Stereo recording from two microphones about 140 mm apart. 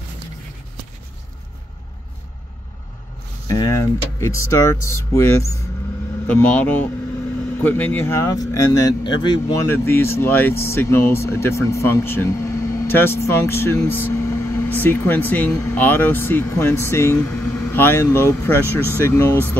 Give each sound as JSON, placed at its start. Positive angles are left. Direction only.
{"t": 3.4, "sound": "speech", "side_deg": 25}
{"t": 9.7, "sound": "speech", "side_deg": 15}